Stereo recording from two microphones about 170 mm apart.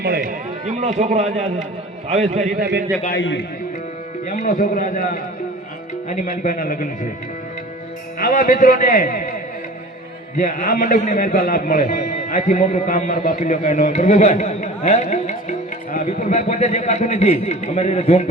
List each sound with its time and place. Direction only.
0.0 s a sound: 60° right (ahead or behind)
0.8 s a man's voice: 45° right (ahead or behind)
3.1 s a man's voice: 90° left
4.3 s a man's voice: 50° left (ahead or behind)
8.2 s a man's voice: 55° left (ahead or behind)
11.4 s a man's voice: 55° left (ahead or behind); by 18.3 s 40° left (ahead or behind)